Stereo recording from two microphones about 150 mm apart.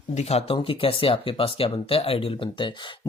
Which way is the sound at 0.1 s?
45° left (ahead or behind).